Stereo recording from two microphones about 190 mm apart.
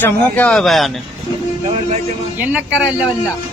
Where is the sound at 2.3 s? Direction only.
10° right (ahead or behind).